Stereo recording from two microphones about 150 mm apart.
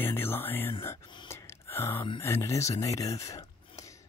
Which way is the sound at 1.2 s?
15° left (ahead or behind).